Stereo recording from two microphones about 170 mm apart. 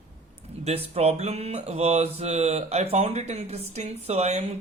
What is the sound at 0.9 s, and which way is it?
Speech, 40° right (ahead or behind).